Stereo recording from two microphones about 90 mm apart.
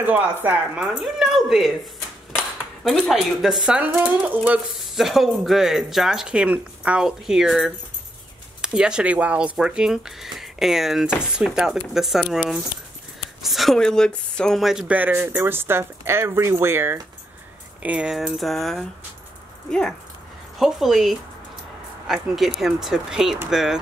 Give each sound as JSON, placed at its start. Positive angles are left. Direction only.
{"t": 0.0, "sound": "speech", "side_deg": -20}
{"t": 1.0, "sound": "speech", "side_deg": -5}
{"t": 2.8, "sound": "speech", "side_deg": 0}
{"t": 4.5, "sound": "speech", "side_deg": -5}
{"t": 13.4, "sound": "a woman's voice", "side_deg": 0}
{"t": 14.6, "sound": "speech", "side_deg": -5}
{"t": 14.9, "sound": "speech", "side_deg": -20}
{"t": 17.8, "sound": "speech", "side_deg": -15}
{"t": 18.1, "sound": "a woman's voice", "side_deg": 0}
{"t": 20.5, "sound": "speech", "side_deg": 0}